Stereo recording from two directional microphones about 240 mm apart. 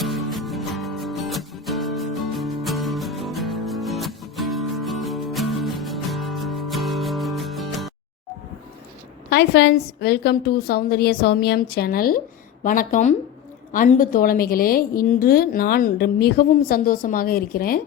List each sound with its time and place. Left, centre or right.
0.0 s music: centre
9.3 s a woman's voice: left